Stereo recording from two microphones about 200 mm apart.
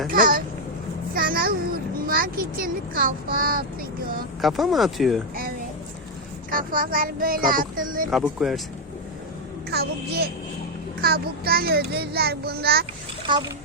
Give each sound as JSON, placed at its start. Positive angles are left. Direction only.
{"t": 0.1, "sound": "a sound", "side_deg": -45}
{"t": 1.1, "sound": "a child's voice", "side_deg": -45}
{"t": 4.4, "sound": "speech", "side_deg": 0}
{"t": 6.5, "sound": "a child's voice", "side_deg": -45}
{"t": 8.1, "sound": "speech", "side_deg": 0}
{"t": 9.6, "sound": "a child's voice", "side_deg": -55}